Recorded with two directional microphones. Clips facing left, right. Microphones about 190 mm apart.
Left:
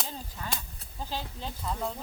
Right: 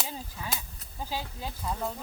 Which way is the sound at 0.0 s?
5° right (ahead or behind).